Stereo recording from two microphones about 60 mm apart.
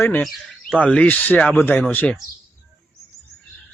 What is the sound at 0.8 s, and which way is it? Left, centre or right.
Speech, centre.